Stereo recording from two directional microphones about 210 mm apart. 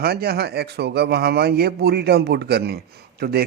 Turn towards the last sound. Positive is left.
turn(degrees=-50)  # may be behind; listen again after turning